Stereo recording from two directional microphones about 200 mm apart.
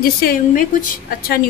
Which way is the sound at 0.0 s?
45° left (ahead or behind).